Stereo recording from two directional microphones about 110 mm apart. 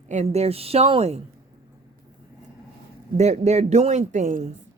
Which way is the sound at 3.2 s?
90° right.